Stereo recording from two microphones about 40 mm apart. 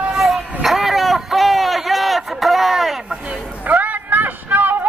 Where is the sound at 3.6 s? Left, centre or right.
Right.